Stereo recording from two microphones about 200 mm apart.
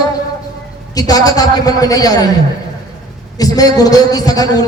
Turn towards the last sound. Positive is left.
turn(degrees=20)  # may be behind; listen again after turning